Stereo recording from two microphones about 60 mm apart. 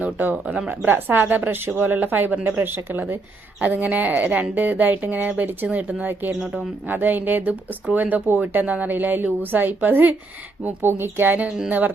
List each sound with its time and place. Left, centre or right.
0.0 s speech: right
0.4 s speech: centre
0.9 s speech: right
6.4 s speech: centre
6.8 s speech: right
11.3 s speech: centre